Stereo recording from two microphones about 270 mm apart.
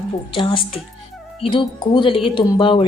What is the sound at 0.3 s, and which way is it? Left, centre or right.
Speech, centre.